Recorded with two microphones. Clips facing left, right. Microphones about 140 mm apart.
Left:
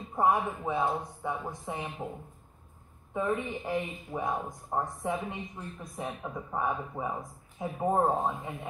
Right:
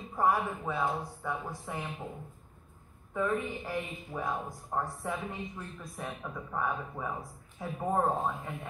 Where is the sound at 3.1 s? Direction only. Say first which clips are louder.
Left 1 dB; 20° left (ahead or behind).